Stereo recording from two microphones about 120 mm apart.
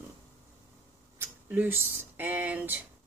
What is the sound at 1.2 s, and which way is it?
Speech, 15° right (ahead or behind).